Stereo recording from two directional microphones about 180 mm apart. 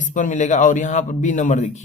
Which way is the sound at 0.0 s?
45° left (ahead or behind).